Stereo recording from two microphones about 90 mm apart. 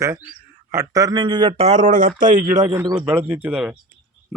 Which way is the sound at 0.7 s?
35° right (ahead or behind).